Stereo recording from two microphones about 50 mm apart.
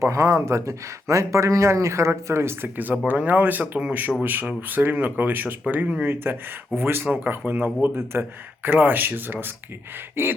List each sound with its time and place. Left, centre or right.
0.0 s speech: right
2.7 s speech: right
6.7 s speech: right